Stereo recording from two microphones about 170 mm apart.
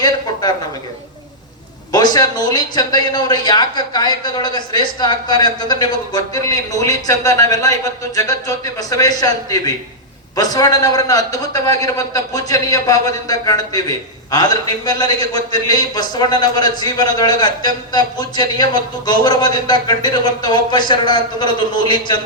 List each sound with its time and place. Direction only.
1.9 s a man's voice: 25° left (ahead or behind)